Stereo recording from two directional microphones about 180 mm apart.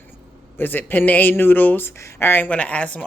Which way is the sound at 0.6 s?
10° left (ahead or behind).